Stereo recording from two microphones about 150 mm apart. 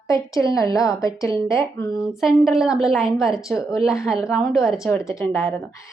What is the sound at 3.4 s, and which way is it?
Speech, 20° left (ahead or behind).